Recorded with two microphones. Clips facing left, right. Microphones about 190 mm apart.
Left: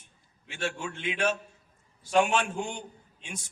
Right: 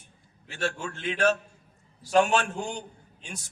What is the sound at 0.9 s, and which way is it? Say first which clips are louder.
Speech: right 1 dB; 10° left (ahead or behind).